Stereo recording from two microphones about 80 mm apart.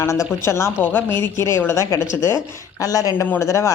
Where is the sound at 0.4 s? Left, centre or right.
Left.